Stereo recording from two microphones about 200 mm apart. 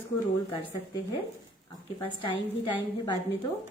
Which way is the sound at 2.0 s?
25° left (ahead or behind).